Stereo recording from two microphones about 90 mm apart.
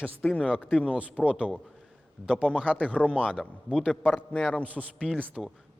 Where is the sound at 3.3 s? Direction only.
10° right (ahead or behind).